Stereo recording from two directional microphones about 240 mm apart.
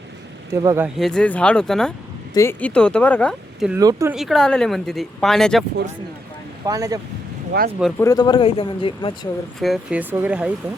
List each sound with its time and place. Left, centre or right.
0.5 s speech: centre
0.9 s speech: centre
3.8 s speech: centre
4.1 s speech: centre
6.7 s speech: centre
7.8 s speech: centre
8.0 s a man's voice: centre
9.6 s speech: centre